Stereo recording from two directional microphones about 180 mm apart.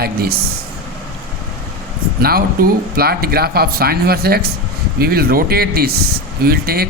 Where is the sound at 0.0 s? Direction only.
60° right (ahead or behind).